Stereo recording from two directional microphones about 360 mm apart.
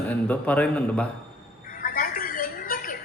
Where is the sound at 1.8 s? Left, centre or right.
Left.